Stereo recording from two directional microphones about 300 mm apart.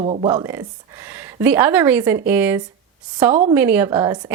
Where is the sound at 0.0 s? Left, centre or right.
Centre.